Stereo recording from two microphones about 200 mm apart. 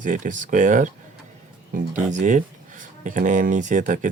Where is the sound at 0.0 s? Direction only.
40° right (ahead or behind).